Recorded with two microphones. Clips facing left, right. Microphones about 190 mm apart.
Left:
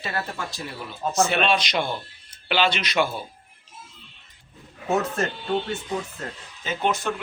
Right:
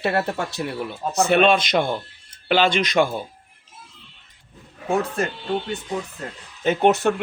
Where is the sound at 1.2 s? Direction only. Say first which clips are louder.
Right 6 dB; 55° right (ahead or behind).